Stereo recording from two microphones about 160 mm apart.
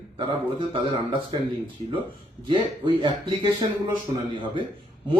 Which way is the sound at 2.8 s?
30° right (ahead or behind).